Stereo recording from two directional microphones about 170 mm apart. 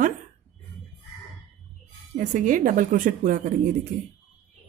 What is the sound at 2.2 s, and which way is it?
Speech, 50° right (ahead or behind).